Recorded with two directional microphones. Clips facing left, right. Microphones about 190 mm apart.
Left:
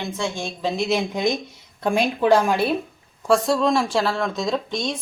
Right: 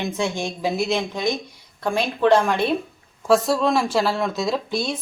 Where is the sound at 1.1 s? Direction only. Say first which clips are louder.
Left 2 dB; 20° left (ahead or behind).